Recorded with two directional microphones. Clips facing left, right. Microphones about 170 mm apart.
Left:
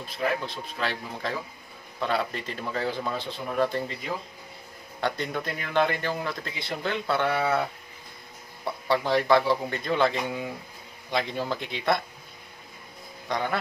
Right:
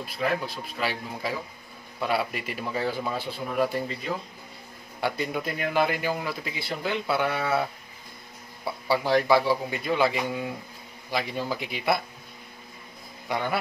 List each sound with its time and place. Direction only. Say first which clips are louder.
0.0 s speech: right 1 dB; 5° right (ahead or behind)
5.0 s speech: right 1 dB; 10° right (ahead or behind)
8.6 s speech: even; 5° right (ahead or behind)
13.3 s speech: even; 10° right (ahead or behind)